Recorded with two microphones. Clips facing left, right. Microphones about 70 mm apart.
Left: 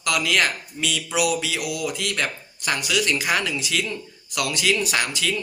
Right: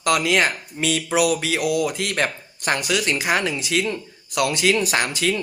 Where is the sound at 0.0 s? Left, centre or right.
Right.